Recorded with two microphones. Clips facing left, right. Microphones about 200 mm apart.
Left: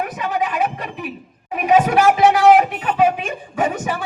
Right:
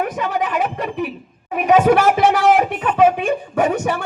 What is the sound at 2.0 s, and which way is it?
Speech, 65° left (ahead or behind).